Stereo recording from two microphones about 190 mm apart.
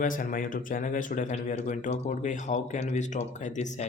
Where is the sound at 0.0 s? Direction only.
45° left (ahead or behind).